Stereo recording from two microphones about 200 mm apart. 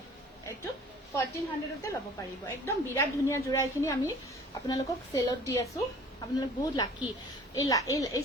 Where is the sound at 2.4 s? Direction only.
10° left (ahead or behind).